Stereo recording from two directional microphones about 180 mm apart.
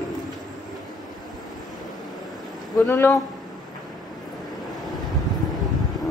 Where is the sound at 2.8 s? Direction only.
15° left (ahead or behind).